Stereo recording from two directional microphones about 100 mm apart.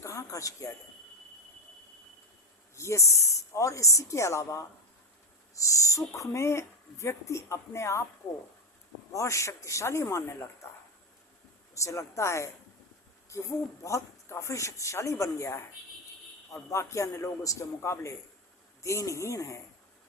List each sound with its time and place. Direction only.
0.0 s a sound: 30° left (ahead or behind)
2.7 s speech: 30° left (ahead or behind)
9.1 s speech: 30° left (ahead or behind)
11.7 s speech: 30° left (ahead or behind)